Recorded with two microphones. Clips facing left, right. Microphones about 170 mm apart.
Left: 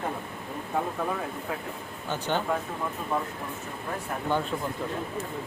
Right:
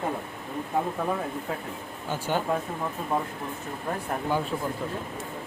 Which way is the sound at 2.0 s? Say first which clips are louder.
Right 1 dB; 10° right (ahead or behind).